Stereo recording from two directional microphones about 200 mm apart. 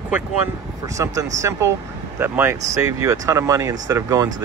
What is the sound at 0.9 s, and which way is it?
Speech, 15° right (ahead or behind).